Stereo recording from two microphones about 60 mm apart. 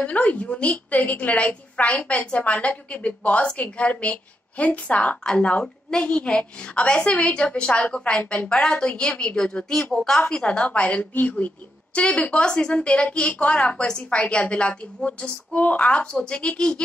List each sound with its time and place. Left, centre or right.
0.0 s a woman's voice: left
8.2 s a woman's voice: left
8.7 s a woman's voice: centre